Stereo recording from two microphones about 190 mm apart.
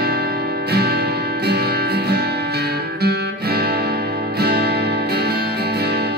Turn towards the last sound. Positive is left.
turn(degrees=-55)  # may be behind; listen again after turning